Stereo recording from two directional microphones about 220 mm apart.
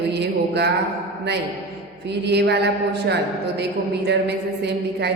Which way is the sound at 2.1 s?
50° right (ahead or behind).